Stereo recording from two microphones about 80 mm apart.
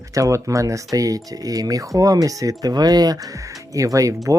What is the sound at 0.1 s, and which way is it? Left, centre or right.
Speech, right.